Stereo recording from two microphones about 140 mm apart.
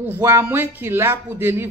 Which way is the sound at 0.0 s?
15° right (ahead or behind).